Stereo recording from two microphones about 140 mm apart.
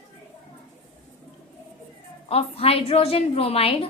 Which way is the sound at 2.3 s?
45° left (ahead or behind).